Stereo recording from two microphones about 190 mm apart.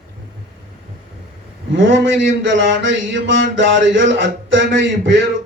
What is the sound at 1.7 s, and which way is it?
A man's voice, 75° right (ahead or behind).